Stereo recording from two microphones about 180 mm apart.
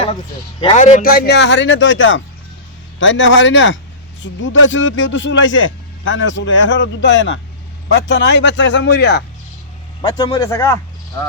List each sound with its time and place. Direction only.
0.6 s a man's voice: 35° left (ahead or behind); by 9.2 s 70° left (ahead or behind)
10.0 s speech: 30° left (ahead or behind)
10.3 s speech: 15° left (ahead or behind)